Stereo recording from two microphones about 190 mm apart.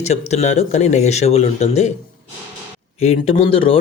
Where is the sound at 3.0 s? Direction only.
30° left (ahead or behind).